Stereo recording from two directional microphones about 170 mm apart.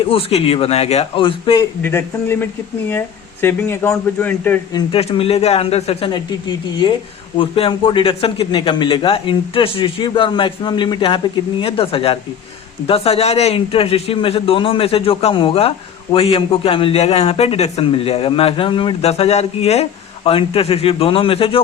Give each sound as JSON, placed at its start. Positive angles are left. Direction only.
{"t": 0.0, "sound": "a man's voice", "side_deg": 35}
{"t": 1.8, "sound": "a man's voice", "side_deg": 15}
{"t": 4.7, "sound": "a man's voice", "side_deg": 35}